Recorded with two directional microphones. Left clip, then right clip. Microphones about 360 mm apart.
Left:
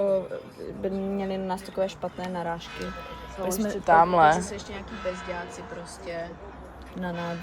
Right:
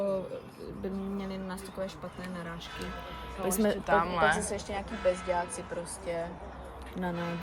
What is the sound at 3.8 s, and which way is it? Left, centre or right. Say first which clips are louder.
Speech: left 10 dB; centre.